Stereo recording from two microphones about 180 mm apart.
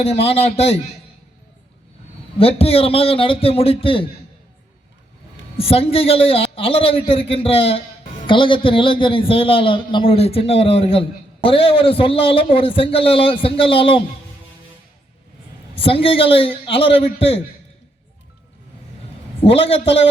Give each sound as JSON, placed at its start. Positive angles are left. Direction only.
{"t": 0.1, "sound": "a man's voice", "side_deg": 35}
{"t": 2.4, "sound": "a man's voice", "side_deg": 30}
{"t": 5.5, "sound": "a man's voice", "side_deg": 30}
{"t": 15.7, "sound": "a man's voice", "side_deg": 30}
{"t": 19.5, "sound": "a man's voice", "side_deg": 30}